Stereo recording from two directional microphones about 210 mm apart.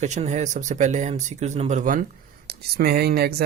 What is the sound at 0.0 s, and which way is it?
Speech, 35° right (ahead or behind).